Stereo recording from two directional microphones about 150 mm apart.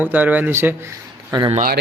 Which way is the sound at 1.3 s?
30° right (ahead or behind).